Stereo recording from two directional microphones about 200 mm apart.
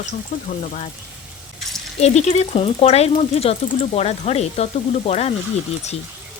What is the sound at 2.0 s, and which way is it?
Speech, 35° left (ahead or behind).